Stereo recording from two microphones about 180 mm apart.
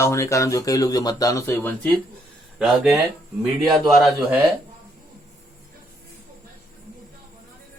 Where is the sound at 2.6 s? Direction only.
5° right (ahead or behind).